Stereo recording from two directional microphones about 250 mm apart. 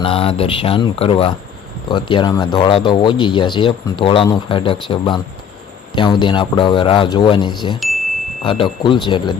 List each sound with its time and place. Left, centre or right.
0.0 s speech: left
7.8 s chime: centre
8.4 s speech: centre